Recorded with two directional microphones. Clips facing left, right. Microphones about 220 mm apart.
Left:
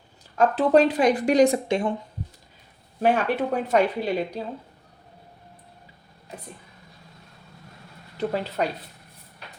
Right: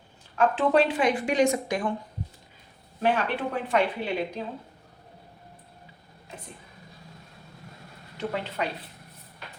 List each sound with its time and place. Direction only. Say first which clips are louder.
0.3 s speech: left 4 dB; 40° left (ahead or behind)
3.0 s speech: left 4 dB; 45° left (ahead or behind)
8.2 s speech: left 5 dB; 35° left (ahead or behind)